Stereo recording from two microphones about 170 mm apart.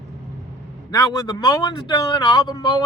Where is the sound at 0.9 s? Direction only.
20° left (ahead or behind).